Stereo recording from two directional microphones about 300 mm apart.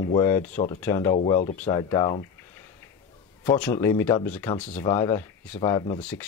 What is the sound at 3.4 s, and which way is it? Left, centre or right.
Speech, centre.